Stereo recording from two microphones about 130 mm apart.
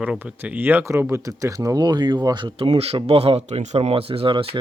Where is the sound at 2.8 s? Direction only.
50° right (ahead or behind).